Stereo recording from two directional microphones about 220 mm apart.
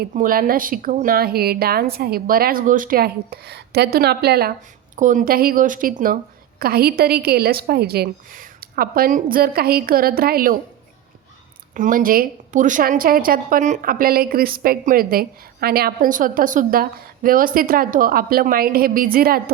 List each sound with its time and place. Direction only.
0.0 s a woman's voice: 40° right (ahead or behind)
11.7 s a woman's voice: 35° right (ahead or behind)